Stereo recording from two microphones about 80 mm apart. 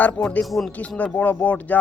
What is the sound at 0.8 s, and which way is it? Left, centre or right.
Speech, centre.